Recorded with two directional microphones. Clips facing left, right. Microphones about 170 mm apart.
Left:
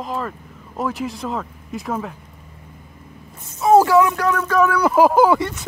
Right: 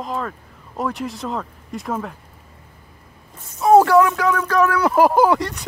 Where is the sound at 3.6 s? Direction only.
Centre (ahead or behind).